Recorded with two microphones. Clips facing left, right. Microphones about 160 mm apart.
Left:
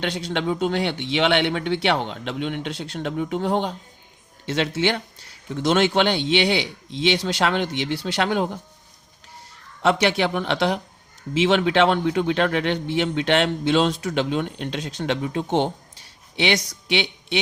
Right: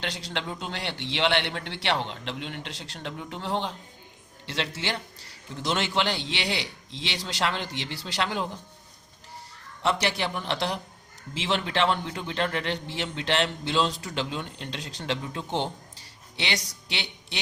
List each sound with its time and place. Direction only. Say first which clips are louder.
0.0 s speech: left 8 dB; 55° left (ahead or behind)
9.8 s speech: left 7 dB; 65° left (ahead or behind)